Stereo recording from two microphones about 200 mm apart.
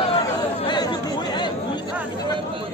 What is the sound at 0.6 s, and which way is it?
Chatter, 20° left (ahead or behind).